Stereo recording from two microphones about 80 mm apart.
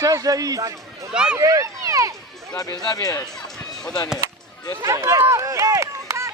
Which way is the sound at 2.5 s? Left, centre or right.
Left.